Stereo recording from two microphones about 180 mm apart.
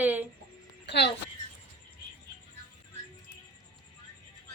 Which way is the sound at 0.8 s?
70° left (ahead or behind).